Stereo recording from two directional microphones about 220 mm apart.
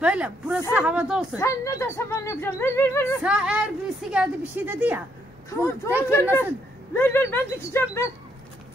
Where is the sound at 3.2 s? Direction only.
5° right (ahead or behind).